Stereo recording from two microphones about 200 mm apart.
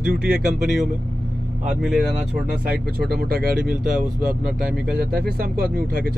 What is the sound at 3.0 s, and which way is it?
Speech, 50° right (ahead or behind).